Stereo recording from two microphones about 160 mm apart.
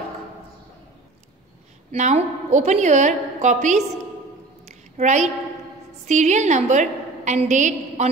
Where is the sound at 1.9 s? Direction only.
45° right (ahead or behind).